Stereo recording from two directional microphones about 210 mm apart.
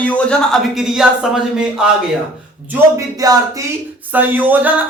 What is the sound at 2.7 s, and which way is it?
Speech, 15° right (ahead or behind).